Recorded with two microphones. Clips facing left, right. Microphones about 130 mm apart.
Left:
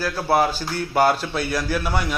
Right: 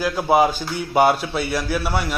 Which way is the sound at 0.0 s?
15° right (ahead or behind).